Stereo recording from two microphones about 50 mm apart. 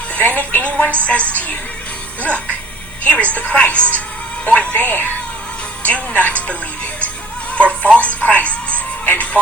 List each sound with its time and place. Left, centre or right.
0.1 s a woman's voice: left
7.5 s music: left